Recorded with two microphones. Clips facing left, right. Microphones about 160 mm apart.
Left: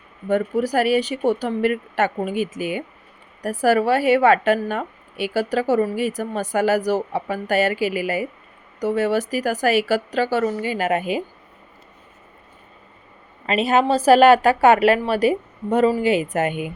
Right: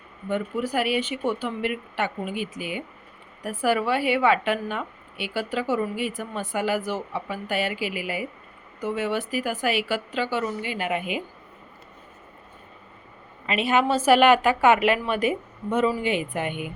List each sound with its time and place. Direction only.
0.3 s a woman's voice: 40° left (ahead or behind)
13.5 s a woman's voice: 40° left (ahead or behind)